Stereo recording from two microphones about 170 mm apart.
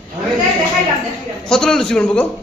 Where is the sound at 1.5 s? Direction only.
5° left (ahead or behind).